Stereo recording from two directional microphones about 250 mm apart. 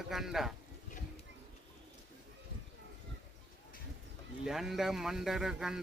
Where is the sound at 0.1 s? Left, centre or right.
Centre.